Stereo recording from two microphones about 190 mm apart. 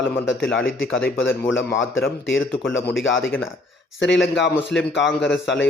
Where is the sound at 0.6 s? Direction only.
90° left.